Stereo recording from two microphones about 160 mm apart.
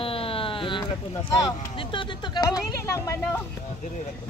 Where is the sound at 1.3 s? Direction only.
30° left (ahead or behind).